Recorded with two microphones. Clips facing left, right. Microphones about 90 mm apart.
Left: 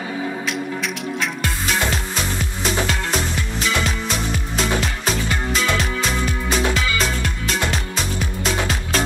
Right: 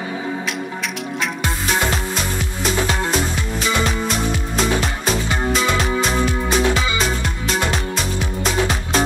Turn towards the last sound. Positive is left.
turn(degrees=-5)  # may be behind; listen again after turning